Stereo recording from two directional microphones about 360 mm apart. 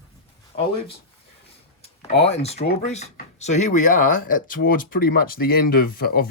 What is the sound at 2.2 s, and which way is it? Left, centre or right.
Speech, centre.